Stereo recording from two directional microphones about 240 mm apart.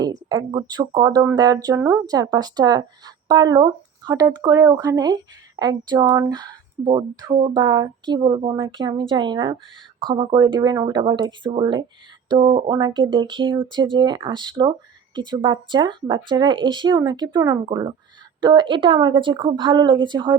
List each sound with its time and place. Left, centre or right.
0.0 s speech: centre